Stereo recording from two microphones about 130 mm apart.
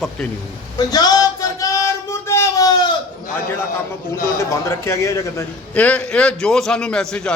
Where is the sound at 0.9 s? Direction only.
30° left (ahead or behind).